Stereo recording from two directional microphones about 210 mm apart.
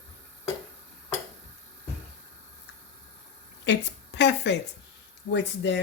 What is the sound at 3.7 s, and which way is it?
A woman's voice, 55° left (ahead or behind).